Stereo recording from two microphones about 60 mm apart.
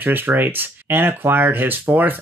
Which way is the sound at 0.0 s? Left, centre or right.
Right.